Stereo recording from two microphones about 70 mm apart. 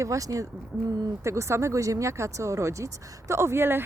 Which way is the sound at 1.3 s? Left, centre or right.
Right.